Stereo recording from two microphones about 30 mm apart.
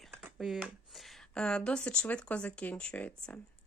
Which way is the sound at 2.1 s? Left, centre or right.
Left.